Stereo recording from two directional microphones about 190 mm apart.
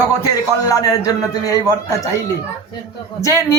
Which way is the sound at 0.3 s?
20° left (ahead or behind).